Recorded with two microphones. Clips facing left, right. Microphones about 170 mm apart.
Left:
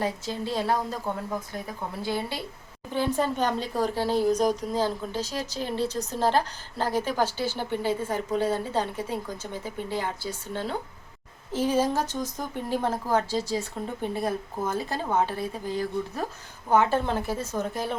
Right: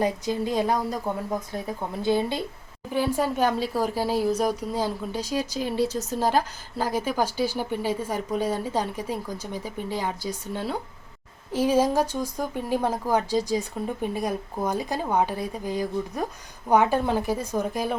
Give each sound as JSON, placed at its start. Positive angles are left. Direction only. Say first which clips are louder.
{"t": 0.0, "sound": "a woman's voice", "louder": "right 4 dB", "side_deg": -15}
{"t": 11.5, "sound": "speech", "louder": "right 3 dB", "side_deg": -10}